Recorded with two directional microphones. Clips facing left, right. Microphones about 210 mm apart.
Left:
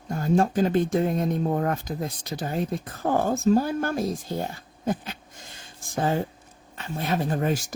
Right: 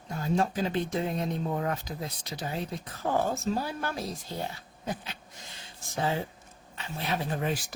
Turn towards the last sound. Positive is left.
turn(degrees=45)  # may be behind; listen again after turning